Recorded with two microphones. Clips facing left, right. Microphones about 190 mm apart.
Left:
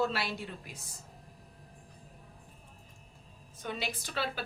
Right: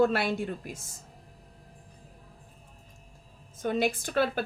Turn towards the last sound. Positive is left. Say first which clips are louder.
# right 9 dB
turn(degrees=-50)  # may be behind; listen again after turning